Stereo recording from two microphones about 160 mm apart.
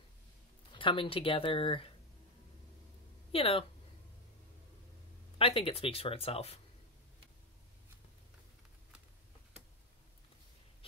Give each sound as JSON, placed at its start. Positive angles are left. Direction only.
{"t": 0.7, "sound": "speech", "side_deg": 35}
{"t": 3.3, "sound": "speech", "side_deg": 35}
{"t": 5.4, "sound": "speech", "side_deg": 35}